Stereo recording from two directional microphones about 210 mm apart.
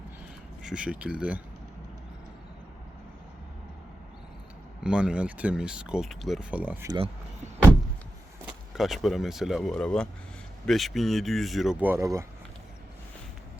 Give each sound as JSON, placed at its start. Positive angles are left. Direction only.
{"t": 0.6, "sound": "speech", "side_deg": -5}
{"t": 4.8, "sound": "speech", "side_deg": -5}
{"t": 6.9, "sound": "speech", "side_deg": -25}
{"t": 8.7, "sound": "speech", "side_deg": 0}